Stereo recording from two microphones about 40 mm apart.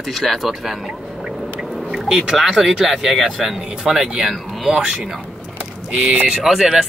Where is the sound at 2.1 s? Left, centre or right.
Centre.